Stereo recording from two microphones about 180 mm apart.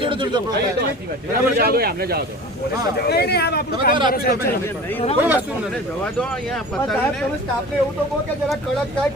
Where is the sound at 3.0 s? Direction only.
65° left (ahead or behind).